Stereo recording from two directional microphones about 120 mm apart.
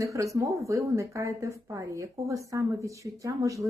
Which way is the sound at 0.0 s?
25° right (ahead or behind).